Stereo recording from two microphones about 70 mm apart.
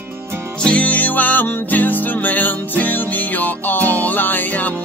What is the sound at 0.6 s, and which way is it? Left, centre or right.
Music, centre.